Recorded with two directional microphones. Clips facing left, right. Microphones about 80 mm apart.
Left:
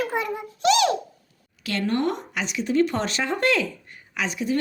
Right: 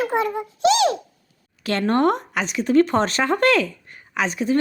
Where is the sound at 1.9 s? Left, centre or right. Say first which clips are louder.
Right 7 dB; right.